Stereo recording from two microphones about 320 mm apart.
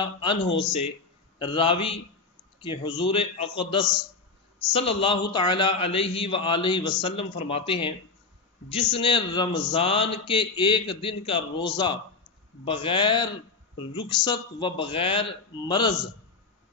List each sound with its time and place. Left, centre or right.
0.0 s speech: centre
1.4 s a man's voice: centre